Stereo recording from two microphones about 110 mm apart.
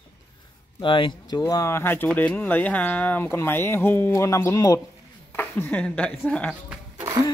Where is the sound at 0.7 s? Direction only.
50° left (ahead or behind).